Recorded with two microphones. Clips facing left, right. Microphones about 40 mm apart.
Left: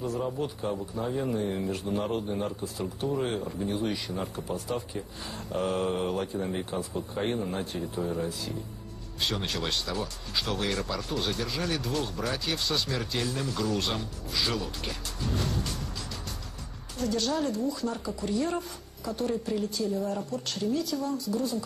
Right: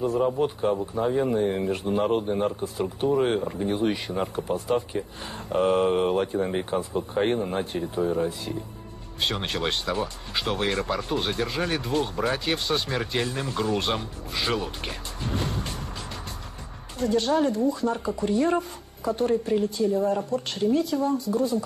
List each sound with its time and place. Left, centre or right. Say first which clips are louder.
0.0 s speech: right 7 dB; right
17.0 s speech: right 6 dB; right